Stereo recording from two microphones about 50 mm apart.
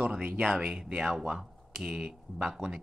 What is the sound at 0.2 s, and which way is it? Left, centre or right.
Speech, right.